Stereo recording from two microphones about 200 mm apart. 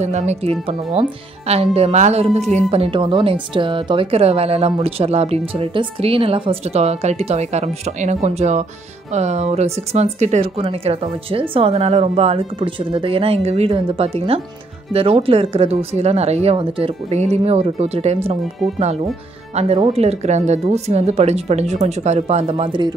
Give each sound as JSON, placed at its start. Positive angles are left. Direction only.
{"t": 0.0, "sound": "speech", "side_deg": -35}
{"t": 19.5, "sound": "speech", "side_deg": -30}